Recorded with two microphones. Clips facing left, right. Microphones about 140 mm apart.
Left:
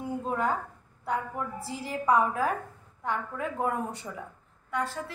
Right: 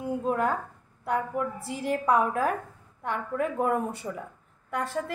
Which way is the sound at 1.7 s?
55° right (ahead or behind).